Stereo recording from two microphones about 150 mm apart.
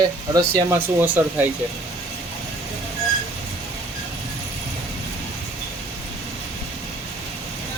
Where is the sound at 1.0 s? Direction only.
10° right (ahead or behind).